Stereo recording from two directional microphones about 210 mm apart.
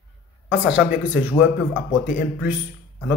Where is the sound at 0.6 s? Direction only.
5° right (ahead or behind).